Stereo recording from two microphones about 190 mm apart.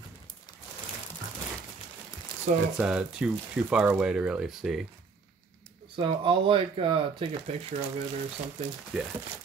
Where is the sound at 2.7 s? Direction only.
5° right (ahead or behind).